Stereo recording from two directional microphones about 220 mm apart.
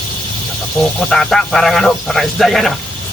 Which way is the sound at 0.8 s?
Centre (ahead or behind).